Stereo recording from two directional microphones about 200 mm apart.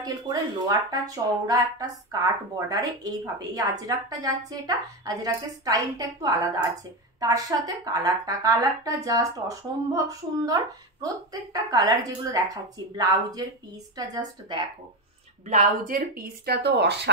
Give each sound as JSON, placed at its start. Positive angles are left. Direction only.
{"t": 0.0, "sound": "a woman's voice", "side_deg": -20}
{"t": 15.4, "sound": "speech", "side_deg": -40}